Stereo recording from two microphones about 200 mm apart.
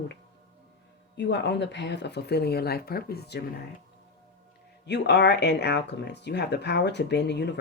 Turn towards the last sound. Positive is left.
turn(degrees=60)  # may be behind; listen again after turning